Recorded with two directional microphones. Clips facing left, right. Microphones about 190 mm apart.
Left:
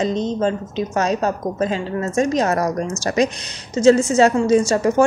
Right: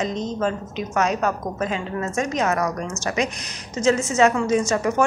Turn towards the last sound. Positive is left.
turn(degrees=30)  # may be behind; listen again after turning